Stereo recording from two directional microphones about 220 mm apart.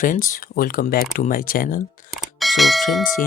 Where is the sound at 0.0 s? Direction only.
35° left (ahead or behind).